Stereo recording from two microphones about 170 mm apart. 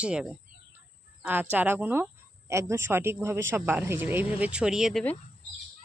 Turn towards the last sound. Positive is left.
turn(degrees=0)  # may be behind; listen again after turning